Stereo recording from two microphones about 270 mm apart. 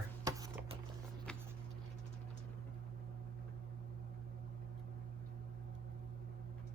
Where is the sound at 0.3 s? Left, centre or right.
Centre.